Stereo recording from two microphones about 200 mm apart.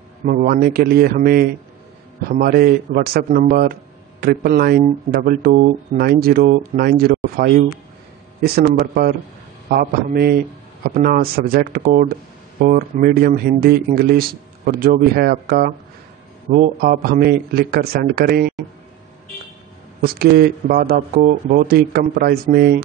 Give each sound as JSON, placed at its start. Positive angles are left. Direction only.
{"t": 0.2, "sound": "speech", "side_deg": -45}
{"t": 20.0, "sound": "speech", "side_deg": -50}